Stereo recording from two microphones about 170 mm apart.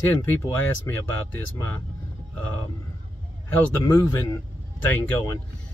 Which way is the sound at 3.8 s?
15° left (ahead or behind).